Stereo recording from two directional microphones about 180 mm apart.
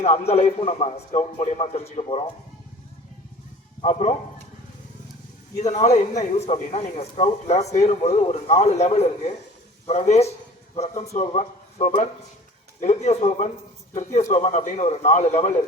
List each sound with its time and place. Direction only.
0.0 s a man's voice: 35° left (ahead or behind)
3.8 s speech: 40° left (ahead or behind)
5.5 s a man's voice: 40° left (ahead or behind)